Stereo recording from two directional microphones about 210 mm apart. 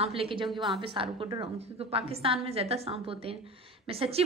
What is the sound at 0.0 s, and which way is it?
A woman's voice, 25° right (ahead or behind).